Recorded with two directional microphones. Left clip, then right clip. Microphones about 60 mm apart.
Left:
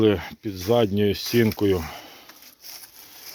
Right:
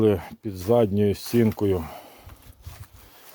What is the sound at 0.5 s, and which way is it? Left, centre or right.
Speech, right.